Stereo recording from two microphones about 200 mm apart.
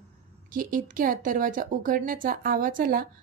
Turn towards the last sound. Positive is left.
turn(degrees=-45)  # may be behind; listen again after turning